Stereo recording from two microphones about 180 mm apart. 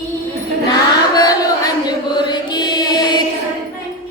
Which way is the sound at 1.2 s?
20° left (ahead or behind).